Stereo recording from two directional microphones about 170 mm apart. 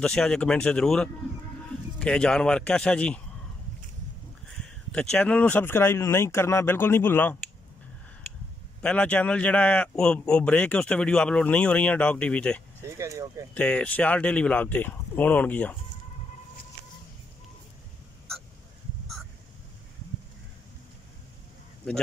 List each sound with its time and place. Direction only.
0.0 s speech: 5° left (ahead or behind)
4.9 s a man's voice: 5° left (ahead or behind)
8.8 s a man's voice: 5° left (ahead or behind)
12.8 s speech: 20° right (ahead or behind)
13.6 s a man's voice: 5° left (ahead or behind)